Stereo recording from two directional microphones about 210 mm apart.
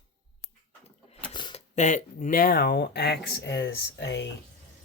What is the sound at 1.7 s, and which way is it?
Speech, 35° left (ahead or behind).